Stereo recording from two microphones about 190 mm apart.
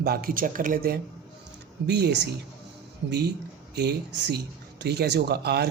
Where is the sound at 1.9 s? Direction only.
65° right (ahead or behind).